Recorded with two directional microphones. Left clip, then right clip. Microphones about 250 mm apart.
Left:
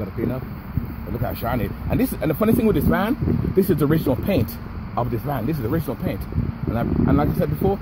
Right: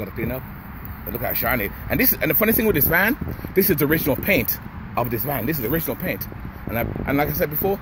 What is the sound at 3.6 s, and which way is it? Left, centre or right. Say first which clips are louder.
Speech: even; right.